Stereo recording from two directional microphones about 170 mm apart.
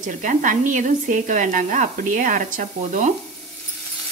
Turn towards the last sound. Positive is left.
turn(degrees=-50)  # may be behind; listen again after turning